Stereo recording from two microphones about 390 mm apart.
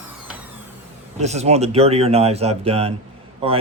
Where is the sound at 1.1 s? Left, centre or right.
Centre.